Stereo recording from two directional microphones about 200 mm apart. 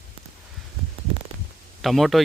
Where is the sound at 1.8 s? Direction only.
Centre (ahead or behind).